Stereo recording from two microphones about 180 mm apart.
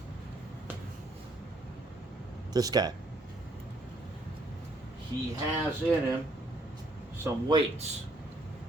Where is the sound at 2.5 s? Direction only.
20° right (ahead or behind).